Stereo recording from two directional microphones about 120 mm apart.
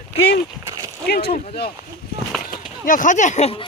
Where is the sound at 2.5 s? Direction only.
90° left; by 3.5 s 75° left (ahead or behind).